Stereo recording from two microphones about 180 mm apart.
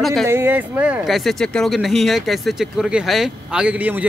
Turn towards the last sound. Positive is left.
turn(degrees=-10)  # may be behind; listen again after turning